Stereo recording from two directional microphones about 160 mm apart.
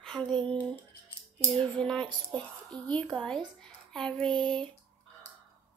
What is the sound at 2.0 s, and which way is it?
Speech, 25° right (ahead or behind).